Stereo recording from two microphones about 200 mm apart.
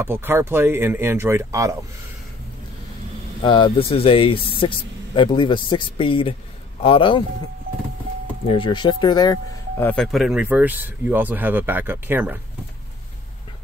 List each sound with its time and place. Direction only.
0.0 s speech: 10° right (ahead or behind)
3.4 s speech: 25° left (ahead or behind)
8.5 s speech: 25° left (ahead or behind)
9.8 s speech: centre (ahead or behind)